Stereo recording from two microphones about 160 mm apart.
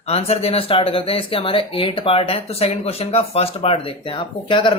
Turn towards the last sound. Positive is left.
turn(degrees=30)  # may be behind; listen again after turning